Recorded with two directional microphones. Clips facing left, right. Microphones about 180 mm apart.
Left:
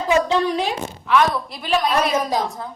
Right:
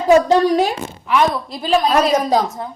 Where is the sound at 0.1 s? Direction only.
40° right (ahead or behind).